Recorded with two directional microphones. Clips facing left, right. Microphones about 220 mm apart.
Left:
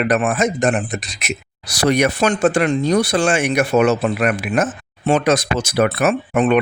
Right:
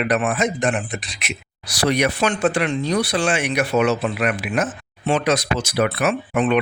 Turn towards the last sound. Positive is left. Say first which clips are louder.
# left 3 dB
turn(degrees=45)  # may be behind; listen again after turning